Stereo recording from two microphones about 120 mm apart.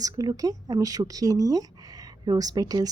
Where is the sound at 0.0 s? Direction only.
30° right (ahead or behind).